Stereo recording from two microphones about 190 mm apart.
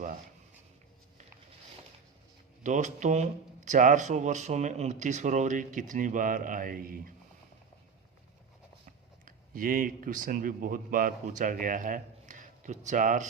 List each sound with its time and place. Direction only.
2.6 s speech: 40° right (ahead or behind)
9.2 s a man's voice: 45° right (ahead or behind)